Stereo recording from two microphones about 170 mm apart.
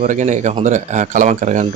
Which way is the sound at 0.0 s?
45° right (ahead or behind).